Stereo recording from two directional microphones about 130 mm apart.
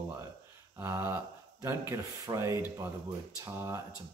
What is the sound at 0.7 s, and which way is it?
Speech, 20° right (ahead or behind).